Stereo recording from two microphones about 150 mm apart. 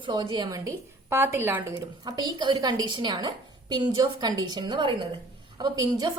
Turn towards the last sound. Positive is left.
turn(degrees=-30)  # may be behind; listen again after turning